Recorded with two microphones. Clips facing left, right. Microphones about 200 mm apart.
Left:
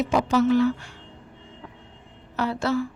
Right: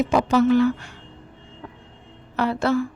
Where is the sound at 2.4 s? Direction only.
60° right (ahead or behind).